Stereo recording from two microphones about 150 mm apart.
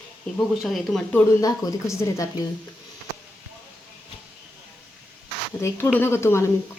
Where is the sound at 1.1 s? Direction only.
20° left (ahead or behind).